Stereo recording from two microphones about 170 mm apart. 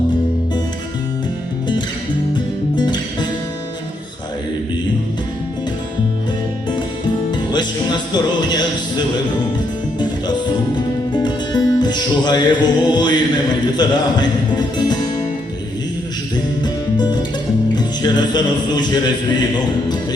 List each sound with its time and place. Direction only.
2.3 s music: 25° left (ahead or behind)
7.3 s music: 25° left (ahead or behind)
16.3 s music: 25° left (ahead or behind)